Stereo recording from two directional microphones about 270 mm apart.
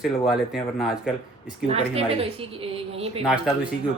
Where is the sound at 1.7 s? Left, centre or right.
Right.